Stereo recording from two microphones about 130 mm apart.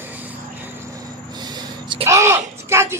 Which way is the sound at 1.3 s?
30° right (ahead or behind).